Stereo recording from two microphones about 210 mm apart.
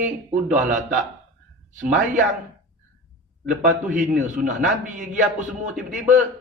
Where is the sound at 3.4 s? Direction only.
40° right (ahead or behind).